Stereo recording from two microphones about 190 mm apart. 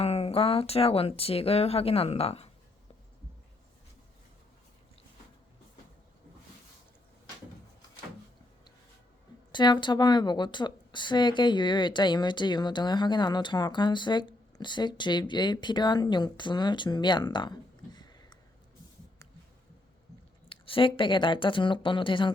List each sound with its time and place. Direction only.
0.0 s speech: 30° left (ahead or behind)
9.5 s speech: 25° left (ahead or behind)
20.5 s speech: 25° left (ahead or behind)